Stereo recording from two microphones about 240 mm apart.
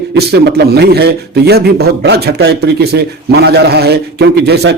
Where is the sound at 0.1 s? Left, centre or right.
Right.